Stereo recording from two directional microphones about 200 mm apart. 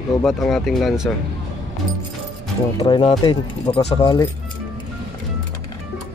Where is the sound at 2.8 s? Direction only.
25° left (ahead or behind).